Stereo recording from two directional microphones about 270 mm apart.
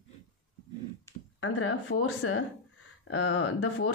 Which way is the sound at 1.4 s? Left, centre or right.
Left.